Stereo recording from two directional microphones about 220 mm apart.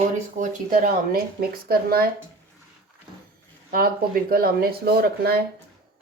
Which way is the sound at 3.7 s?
40° right (ahead or behind).